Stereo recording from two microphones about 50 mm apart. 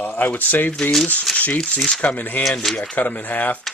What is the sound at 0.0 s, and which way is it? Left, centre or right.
Speech, left.